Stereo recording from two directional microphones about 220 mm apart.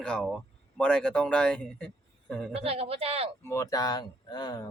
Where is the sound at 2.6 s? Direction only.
25° right (ahead or behind).